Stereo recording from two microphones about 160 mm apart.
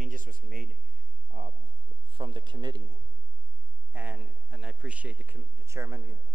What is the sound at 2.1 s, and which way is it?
Speech, 30° right (ahead or behind).